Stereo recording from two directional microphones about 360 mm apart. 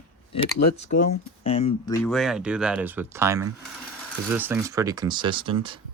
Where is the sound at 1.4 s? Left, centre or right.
Centre.